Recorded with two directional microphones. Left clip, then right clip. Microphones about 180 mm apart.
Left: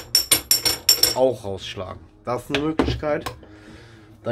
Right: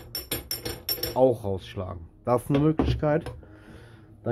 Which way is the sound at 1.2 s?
35° right (ahead or behind).